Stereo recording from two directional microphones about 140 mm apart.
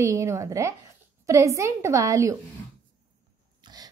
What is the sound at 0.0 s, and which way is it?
A woman's voice, 20° right (ahead or behind).